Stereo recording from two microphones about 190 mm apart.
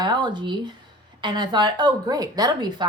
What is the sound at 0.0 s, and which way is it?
Speech, 25° right (ahead or behind).